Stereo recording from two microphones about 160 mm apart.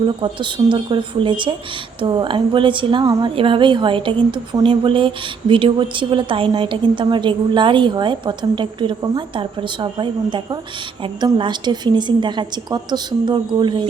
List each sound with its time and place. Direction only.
0.2 s a woman's voice: 30° right (ahead or behind)